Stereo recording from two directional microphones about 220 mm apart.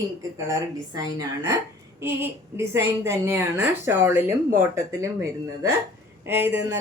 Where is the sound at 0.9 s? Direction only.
10° right (ahead or behind).